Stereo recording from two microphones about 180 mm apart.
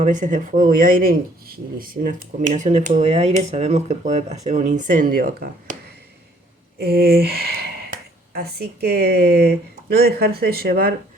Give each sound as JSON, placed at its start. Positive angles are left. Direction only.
{"t": 0.0, "sound": "speech", "side_deg": -45}
{"t": 6.7, "sound": "a sound", "side_deg": -60}
{"t": 8.3, "sound": "speech", "side_deg": -60}